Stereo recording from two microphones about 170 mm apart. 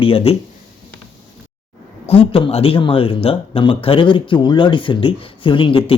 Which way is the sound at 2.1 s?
30° left (ahead or behind).